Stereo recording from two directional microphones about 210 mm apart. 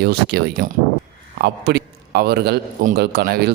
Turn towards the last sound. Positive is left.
turn(degrees=-50)  # may be behind; listen again after turning